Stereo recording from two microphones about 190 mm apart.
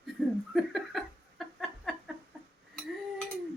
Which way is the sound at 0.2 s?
5° left (ahead or behind).